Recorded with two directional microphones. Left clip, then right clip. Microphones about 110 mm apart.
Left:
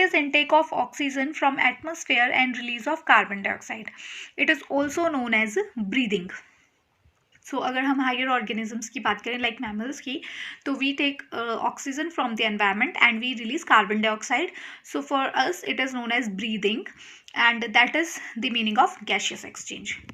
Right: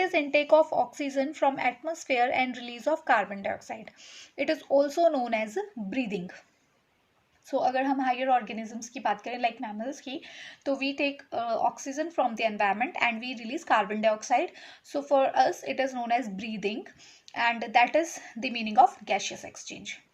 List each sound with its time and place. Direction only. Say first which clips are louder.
0.0 s a woman's voice: left 4 dB; 25° right (ahead or behind)
7.6 s speech: left 2 dB; 15° right (ahead or behind)